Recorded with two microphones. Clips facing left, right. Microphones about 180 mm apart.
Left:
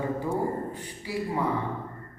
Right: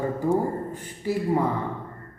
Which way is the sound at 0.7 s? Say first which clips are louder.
Right 6 dB; 45° right (ahead or behind).